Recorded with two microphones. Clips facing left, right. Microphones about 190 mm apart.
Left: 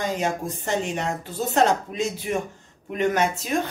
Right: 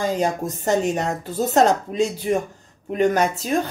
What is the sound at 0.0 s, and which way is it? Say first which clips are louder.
Speech: right 4 dB; 40° right (ahead or behind).